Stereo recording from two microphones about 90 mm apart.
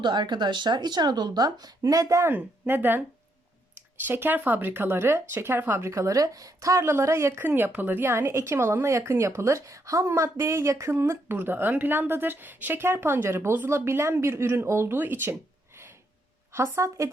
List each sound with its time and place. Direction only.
0.0 s speech: 55° right (ahead or behind); by 2.3 s 35° right (ahead or behind)
2.3 s speech: 20° right (ahead or behind)
4.0 s speech: 20° right (ahead or behind)
5.9 s speech: 35° right (ahead or behind)